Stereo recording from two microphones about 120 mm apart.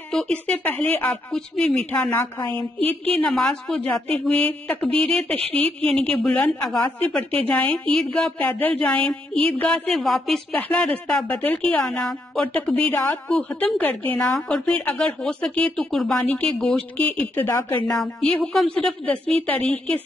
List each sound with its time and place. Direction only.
0.1 s a woman's voice: 5° left (ahead or behind)